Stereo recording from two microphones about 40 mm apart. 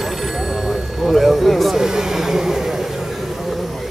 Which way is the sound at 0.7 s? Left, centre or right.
Centre.